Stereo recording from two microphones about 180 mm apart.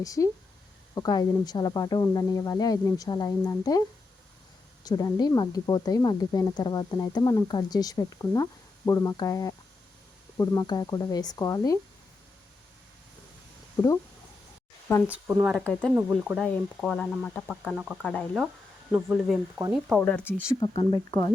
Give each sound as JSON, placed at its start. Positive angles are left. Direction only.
{"t": 0.0, "sound": "speech", "side_deg": 20}
{"t": 13.8, "sound": "speech", "side_deg": 20}
{"t": 15.0, "sound": "speech", "side_deg": -10}
{"t": 15.5, "sound": "speech", "side_deg": 5}
{"t": 16.0, "sound": "speech", "side_deg": -10}
{"t": 16.8, "sound": "speech", "side_deg": 5}
{"t": 17.6, "sound": "speech", "side_deg": -5}
{"t": 18.0, "sound": "speech", "side_deg": 5}
{"t": 18.9, "sound": "speech", "side_deg": -10}
{"t": 20.0, "sound": "speech", "side_deg": 10}
{"t": 20.6, "sound": "speech", "side_deg": 25}